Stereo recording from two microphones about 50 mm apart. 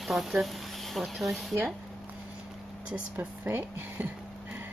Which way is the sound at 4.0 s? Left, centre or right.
Right.